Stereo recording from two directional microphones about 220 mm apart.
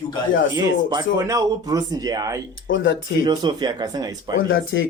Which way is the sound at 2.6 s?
60° left (ahead or behind).